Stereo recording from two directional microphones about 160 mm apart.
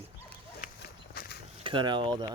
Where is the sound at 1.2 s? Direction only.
70° left (ahead or behind).